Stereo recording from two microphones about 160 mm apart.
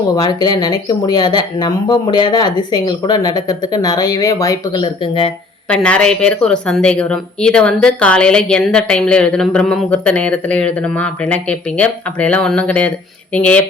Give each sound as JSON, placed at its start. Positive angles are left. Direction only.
{"t": 0.2, "sound": "speech", "side_deg": 25}
{"t": 5.7, "sound": "speech", "side_deg": 5}
{"t": 11.8, "sound": "speech", "side_deg": 10}